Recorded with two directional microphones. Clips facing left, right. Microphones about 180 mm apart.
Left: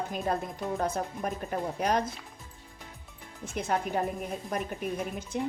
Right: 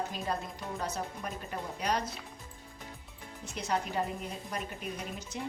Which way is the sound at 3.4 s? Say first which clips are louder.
Left 3 dB; 50° left (ahead or behind).